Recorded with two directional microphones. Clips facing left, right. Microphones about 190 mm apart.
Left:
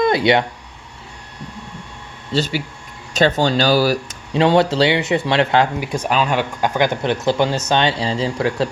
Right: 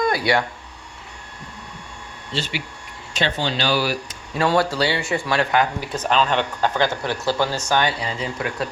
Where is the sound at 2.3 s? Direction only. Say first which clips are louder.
Left 8 dB; 40° left (ahead or behind).